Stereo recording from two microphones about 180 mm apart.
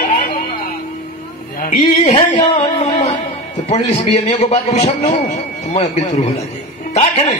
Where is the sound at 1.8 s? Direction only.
25° left (ahead or behind).